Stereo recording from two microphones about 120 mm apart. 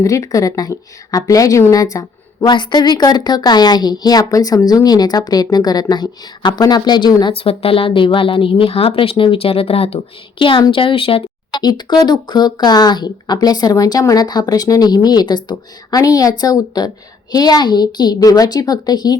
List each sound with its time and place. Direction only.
0.0 s a woman's voice: 30° left (ahead or behind)
7.3 s a woman's voice: 50° left (ahead or behind)
11.5 s speech: 35° left (ahead or behind)